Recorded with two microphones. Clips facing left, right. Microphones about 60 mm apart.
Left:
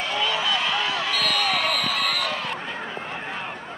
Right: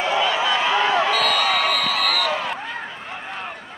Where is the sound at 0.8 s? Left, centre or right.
Right.